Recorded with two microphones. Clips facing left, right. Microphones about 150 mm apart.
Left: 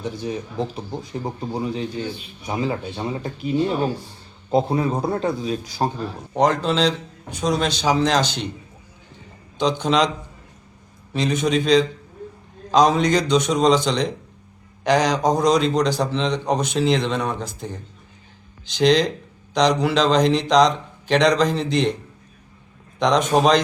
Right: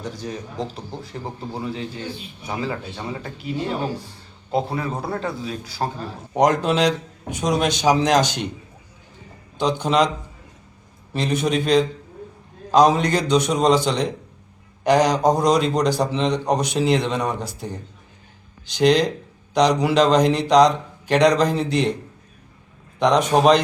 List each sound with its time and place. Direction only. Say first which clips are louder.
0.3 s a man's voice: left 3 dB; 5° left (ahead or behind)
4.5 s speech: left 4 dB; 20° left (ahead or behind)
6.3 s a man's voice: right 1 dB; 10° right (ahead or behind)
9.6 s a man's voice: even; 5° right (ahead or behind)
11.1 s a man's voice: left 1 dB; 5° right (ahead or behind)
18.8 s a man's voice: even; 5° right (ahead or behind)
23.0 s a man's voice: right 1 dB; 5° right (ahead or behind)